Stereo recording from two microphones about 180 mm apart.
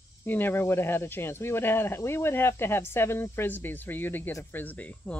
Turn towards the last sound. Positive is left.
turn(degrees=10)  # may be behind; listen again after turning